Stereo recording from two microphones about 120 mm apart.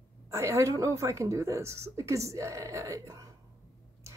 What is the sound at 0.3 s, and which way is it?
A woman's voice, 25° right (ahead or behind).